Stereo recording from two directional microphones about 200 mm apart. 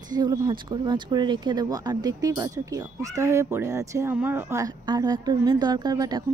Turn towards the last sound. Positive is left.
turn(degrees=-20)  # may be behind; listen again after turning